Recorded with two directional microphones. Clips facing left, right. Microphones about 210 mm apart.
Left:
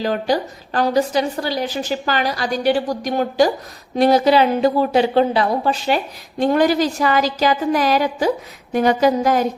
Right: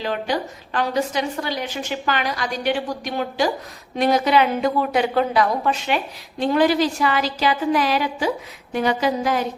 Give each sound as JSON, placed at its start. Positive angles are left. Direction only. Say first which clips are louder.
{"t": 0.0, "sound": "a woman's voice", "louder": "left 5 dB", "side_deg": 40}